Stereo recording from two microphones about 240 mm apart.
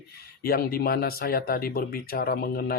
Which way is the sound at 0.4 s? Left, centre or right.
Left.